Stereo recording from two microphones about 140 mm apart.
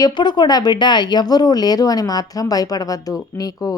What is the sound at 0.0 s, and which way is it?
Speech, 30° left (ahead or behind).